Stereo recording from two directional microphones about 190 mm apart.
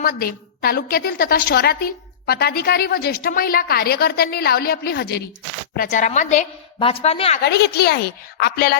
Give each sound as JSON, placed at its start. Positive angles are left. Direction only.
{"t": 0.0, "sound": "a woman's voice", "side_deg": 50}
{"t": 5.7, "sound": "a woman's voice", "side_deg": 45}
{"t": 7.4, "sound": "a woman's voice", "side_deg": 60}